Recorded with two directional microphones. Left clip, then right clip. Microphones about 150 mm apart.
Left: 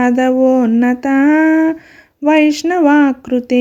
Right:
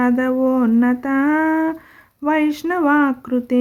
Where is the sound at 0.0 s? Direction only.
20° left (ahead or behind).